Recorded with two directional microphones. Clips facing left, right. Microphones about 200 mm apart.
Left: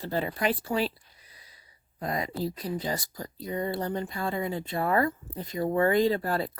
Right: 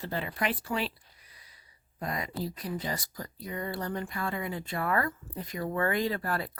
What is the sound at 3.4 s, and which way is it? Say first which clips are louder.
Speech: left 5 dB; 25° left (ahead or behind).